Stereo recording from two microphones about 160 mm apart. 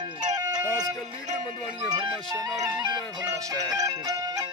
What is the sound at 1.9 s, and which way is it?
Music, 25° right (ahead or behind).